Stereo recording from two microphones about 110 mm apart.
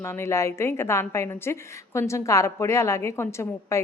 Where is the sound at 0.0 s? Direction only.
25° left (ahead or behind).